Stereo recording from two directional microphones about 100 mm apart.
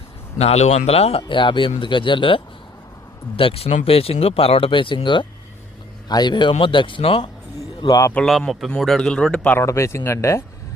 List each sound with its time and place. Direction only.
0.3 s speech: 90° left
1.3 s speech: 55° left (ahead or behind)
3.3 s a man's voice: 70° left (ahead or behind)
7.9 s speech: 35° left (ahead or behind)
8.1 s a man's voice: 5° left (ahead or behind)
9.6 s speech: 30° left (ahead or behind)